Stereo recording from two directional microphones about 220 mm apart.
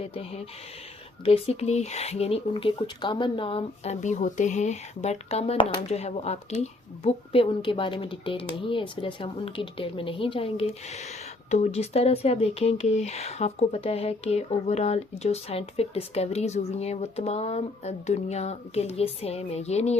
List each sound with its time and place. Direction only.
0.0 s speech: 25° left (ahead or behind)